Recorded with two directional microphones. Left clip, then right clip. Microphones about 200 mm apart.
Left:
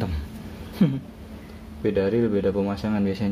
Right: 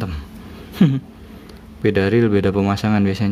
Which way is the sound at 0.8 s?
35° right (ahead or behind).